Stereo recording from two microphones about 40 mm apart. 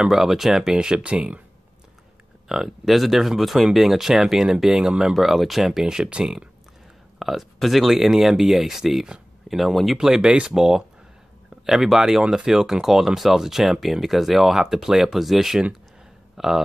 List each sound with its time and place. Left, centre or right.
0.1 s speech: centre
0.7 s speech: right
2.4 s speech: centre
5.1 s speech: centre
5.9 s speech: right
7.2 s a sound: centre
7.5 s speech: centre